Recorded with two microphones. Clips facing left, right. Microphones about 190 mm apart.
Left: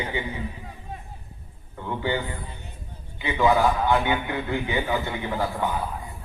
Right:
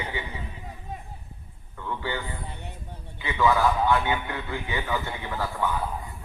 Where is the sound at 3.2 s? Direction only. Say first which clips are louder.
Left 2 dB; 20° left (ahead or behind).